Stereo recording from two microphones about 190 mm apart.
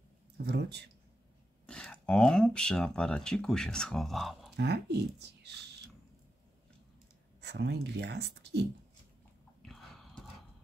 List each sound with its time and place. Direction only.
0.5 s speech: 60° right (ahead or behind)
1.7 s speech: 5° left (ahead or behind)
4.6 s speech: 60° right (ahead or behind)
7.4 s speech: 60° right (ahead or behind)
9.6 s biting: 5° left (ahead or behind)